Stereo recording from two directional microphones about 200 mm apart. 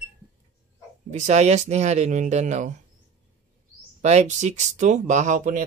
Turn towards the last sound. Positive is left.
turn(degrees=-40)  # may be behind; listen again after turning